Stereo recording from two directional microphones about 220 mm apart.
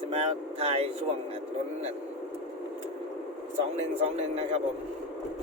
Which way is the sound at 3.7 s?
30° right (ahead or behind).